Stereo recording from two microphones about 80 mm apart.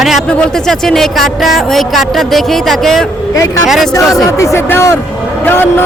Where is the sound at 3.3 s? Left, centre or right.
Left.